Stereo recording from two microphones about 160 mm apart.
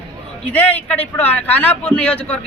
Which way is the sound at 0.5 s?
10° left (ahead or behind).